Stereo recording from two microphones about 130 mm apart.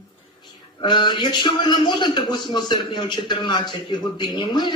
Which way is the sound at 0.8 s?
35° left (ahead or behind).